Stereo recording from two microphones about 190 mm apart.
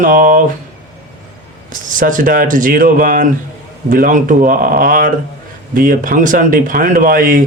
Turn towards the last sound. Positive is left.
turn(degrees=-45)  # may be behind; listen again after turning